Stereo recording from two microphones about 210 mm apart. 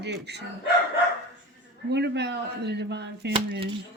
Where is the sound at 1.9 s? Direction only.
55° right (ahead or behind).